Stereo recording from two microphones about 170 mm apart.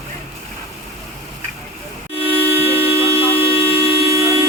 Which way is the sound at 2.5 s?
15° right (ahead or behind).